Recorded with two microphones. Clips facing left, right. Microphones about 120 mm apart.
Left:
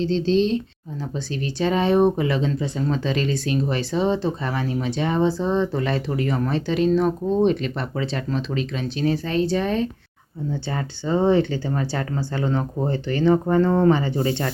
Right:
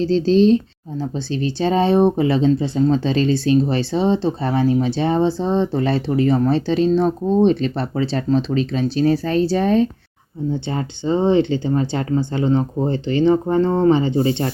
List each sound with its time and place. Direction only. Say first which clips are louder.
0.0 s speech: right 5 dB; 40° right (ahead or behind)
10.7 s speech: right 2 dB; 25° right (ahead or behind)